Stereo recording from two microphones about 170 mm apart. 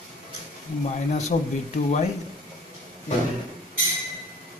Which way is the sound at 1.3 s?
45° left (ahead or behind).